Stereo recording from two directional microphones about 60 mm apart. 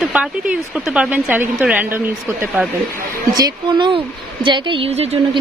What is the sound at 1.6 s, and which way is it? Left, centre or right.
Speech, right.